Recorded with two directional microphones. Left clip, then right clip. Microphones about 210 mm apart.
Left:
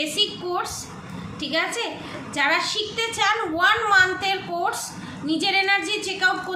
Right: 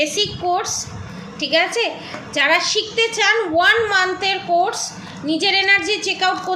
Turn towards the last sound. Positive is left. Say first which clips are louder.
# right 5 dB
turn(degrees=0)  # may be behind; listen again after turning